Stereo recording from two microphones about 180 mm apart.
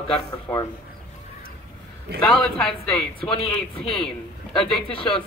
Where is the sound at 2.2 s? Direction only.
5° left (ahead or behind).